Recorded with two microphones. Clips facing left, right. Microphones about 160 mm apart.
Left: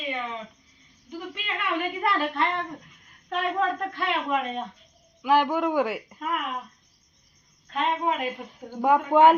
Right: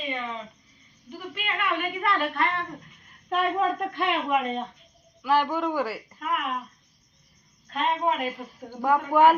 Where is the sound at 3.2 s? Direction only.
15° right (ahead or behind).